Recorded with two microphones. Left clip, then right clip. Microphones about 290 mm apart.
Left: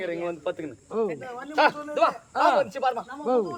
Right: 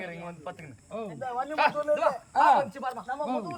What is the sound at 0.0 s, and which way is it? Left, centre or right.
Speech, left.